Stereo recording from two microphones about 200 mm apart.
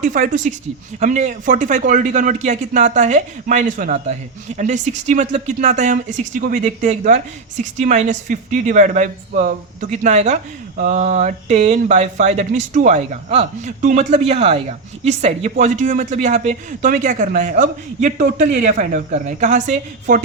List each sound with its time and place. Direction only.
0.0 s speech: 40° right (ahead or behind)